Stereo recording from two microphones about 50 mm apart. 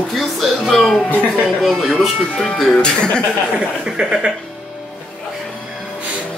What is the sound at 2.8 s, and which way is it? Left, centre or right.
Speech, centre.